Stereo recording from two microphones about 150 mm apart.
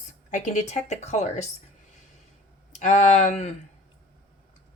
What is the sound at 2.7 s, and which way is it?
Speech, 50° left (ahead or behind).